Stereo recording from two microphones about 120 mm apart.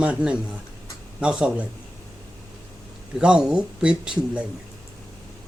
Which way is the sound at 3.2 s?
10° right (ahead or behind).